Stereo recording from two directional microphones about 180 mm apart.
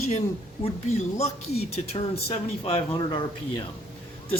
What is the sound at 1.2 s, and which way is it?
Speech, 35° left (ahead or behind).